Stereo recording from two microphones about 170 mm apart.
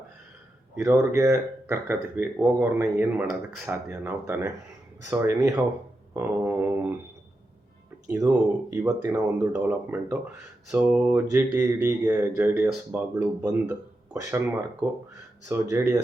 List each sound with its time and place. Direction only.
0.8 s speech: 15° right (ahead or behind)
8.1 s speech: 15° right (ahead or behind)
13.4 s speech: 20° right (ahead or behind)
15.4 s speech: 20° right (ahead or behind)